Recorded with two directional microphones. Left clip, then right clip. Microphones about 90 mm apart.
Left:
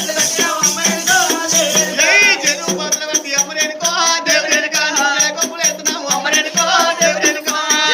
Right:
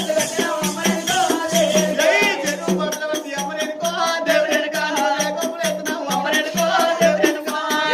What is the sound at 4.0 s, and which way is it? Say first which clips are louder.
Music: left 3 dB; 40° right (ahead or behind).